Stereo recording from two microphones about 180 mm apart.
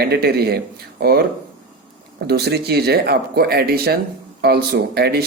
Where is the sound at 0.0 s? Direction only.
65° right (ahead or behind).